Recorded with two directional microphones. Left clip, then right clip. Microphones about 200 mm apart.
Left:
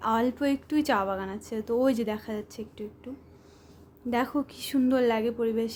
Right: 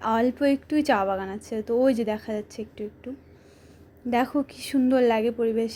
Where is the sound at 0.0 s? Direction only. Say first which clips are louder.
Right 3 dB; 10° right (ahead or behind).